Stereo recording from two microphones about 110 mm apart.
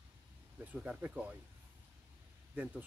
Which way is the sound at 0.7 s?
10° right (ahead or behind).